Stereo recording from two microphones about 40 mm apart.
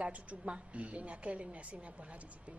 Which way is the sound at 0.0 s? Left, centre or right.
Right.